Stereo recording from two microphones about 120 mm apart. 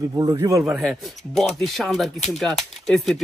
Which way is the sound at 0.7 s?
Centre (ahead or behind).